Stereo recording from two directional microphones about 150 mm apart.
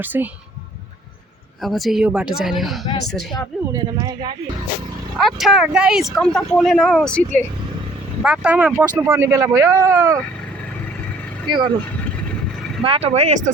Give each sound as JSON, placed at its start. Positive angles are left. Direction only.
{"t": 0.0, "sound": "speech", "side_deg": -10}
{"t": 1.6, "sound": "speech", "side_deg": 0}
{"t": 3.7, "sound": "speech", "side_deg": -25}
{"t": 5.2, "sound": "speech", "side_deg": 0}
{"t": 8.2, "sound": "speech", "side_deg": -10}
{"t": 11.4, "sound": "speech", "side_deg": -30}
{"t": 12.8, "sound": "speech", "side_deg": -40}